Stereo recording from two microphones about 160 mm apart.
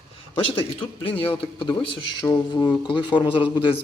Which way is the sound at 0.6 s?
35° left (ahead or behind).